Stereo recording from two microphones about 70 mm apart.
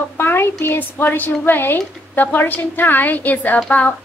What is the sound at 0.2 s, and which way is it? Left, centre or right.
A woman's voice, left.